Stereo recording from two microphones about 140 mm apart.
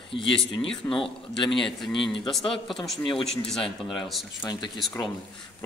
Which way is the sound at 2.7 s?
Centre (ahead or behind).